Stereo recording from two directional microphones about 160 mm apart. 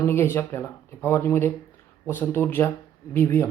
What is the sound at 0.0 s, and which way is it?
Speech, 15° left (ahead or behind).